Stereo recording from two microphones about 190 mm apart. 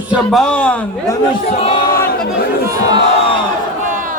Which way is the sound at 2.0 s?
55° left (ahead or behind).